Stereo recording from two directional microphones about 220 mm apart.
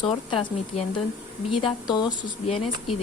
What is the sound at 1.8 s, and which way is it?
Speech, 20° left (ahead or behind).